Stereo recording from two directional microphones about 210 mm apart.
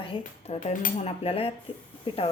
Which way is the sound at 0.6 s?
35° left (ahead or behind).